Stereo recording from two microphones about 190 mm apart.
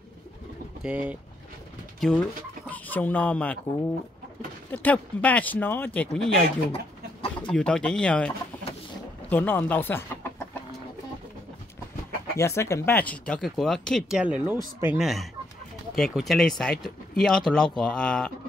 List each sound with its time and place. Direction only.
0.8 s speech: 5° right (ahead or behind)
2.0 s speech: 5° left (ahead or behind)
4.6 s speech: 10° left (ahead or behind)
6.7 s chicken: 30° left (ahead or behind)
7.5 s speech: 5° left (ahead or behind)
9.3 s speech: 10° left (ahead or behind)
12.4 s speech: 15° left (ahead or behind)